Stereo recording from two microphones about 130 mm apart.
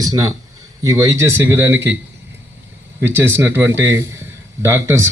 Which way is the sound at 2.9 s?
20° right (ahead or behind).